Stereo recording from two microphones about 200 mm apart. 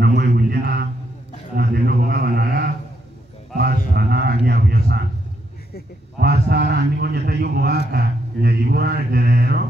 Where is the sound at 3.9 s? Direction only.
55° right (ahead or behind).